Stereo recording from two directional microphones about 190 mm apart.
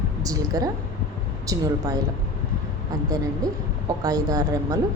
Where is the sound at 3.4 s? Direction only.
20° right (ahead or behind).